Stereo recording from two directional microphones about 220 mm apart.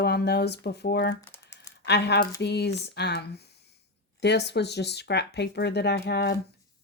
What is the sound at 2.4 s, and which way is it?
A woman's voice, 50° left (ahead or behind).